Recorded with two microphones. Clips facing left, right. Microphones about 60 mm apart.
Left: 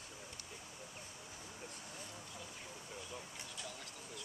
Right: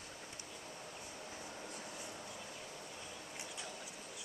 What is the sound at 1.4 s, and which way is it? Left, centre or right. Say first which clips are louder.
Vehicle: right 2 dB; right.